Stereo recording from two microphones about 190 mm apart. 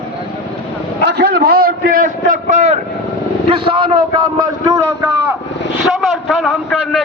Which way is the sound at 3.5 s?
25° right (ahead or behind).